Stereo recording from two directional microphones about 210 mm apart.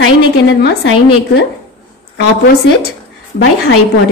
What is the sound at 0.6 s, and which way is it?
Speech, 50° left (ahead or behind).